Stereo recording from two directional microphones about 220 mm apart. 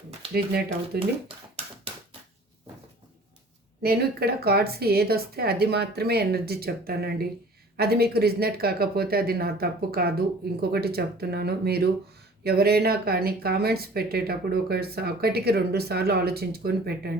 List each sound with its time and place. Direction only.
3.8 s speech: 45° right (ahead or behind)